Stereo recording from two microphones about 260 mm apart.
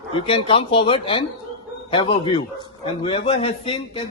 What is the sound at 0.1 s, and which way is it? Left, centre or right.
A man's voice, centre.